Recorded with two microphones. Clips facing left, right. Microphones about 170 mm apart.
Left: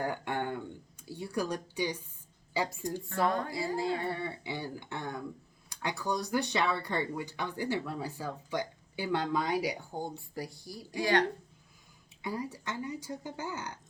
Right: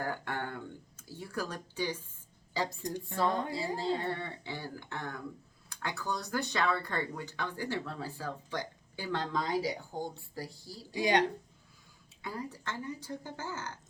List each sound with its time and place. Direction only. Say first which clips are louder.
0.0 s a sound: left 3 dB; 15° left (ahead or behind)
2.5 s speech: left 2 dB; 10° left (ahead or behind)
2.8 s speech: left 1 dB; 20° right (ahead or behind)
3.8 s speech: left 1 dB; 10° left (ahead or behind)
10.9 s speech: even; 20° right (ahead or behind)
12.2 s speech: left 3 dB; 10° left (ahead or behind)